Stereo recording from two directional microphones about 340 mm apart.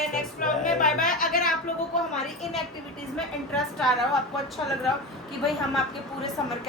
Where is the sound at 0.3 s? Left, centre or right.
Left.